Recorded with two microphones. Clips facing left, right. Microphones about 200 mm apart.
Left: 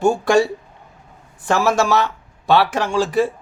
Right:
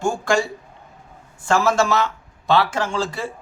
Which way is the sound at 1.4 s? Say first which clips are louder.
Left 1 dB; 15° left (ahead or behind).